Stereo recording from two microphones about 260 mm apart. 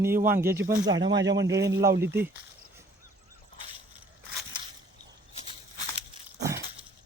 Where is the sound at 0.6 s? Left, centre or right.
Right.